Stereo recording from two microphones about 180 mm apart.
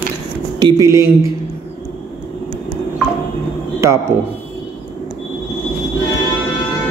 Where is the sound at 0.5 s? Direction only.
20° right (ahead or behind).